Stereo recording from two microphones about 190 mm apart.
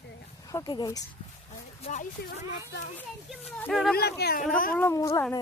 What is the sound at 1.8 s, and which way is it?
Speech, 40° left (ahead or behind).